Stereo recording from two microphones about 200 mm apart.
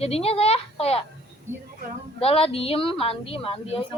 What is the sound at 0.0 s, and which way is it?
A woman's voice, 30° left (ahead or behind).